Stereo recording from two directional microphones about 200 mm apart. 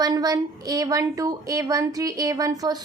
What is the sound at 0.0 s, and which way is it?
A woman's voice, 20° right (ahead or behind).